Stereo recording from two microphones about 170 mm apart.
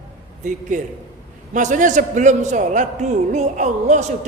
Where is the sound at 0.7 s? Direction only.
50° right (ahead or behind).